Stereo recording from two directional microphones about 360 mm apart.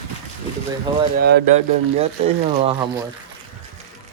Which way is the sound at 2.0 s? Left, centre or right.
Centre.